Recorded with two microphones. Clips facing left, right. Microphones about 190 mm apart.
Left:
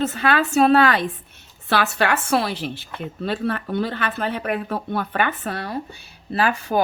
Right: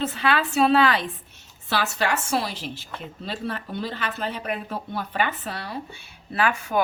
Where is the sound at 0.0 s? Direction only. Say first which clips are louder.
Left 3 dB; 45° left (ahead or behind).